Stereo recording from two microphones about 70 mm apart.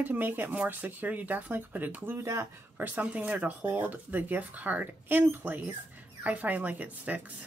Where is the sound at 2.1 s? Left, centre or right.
Right.